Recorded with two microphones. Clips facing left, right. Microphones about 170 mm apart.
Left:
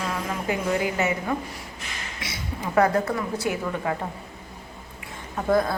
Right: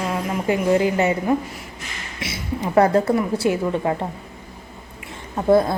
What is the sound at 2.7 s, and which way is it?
A woman's voice, 30° right (ahead or behind).